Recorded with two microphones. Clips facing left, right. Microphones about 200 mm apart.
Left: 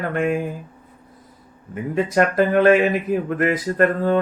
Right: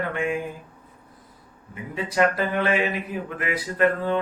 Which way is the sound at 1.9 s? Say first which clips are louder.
Left 4 dB; 45° left (ahead or behind).